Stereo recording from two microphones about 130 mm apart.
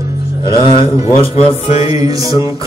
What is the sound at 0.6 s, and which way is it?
Mantra, 45° left (ahead or behind).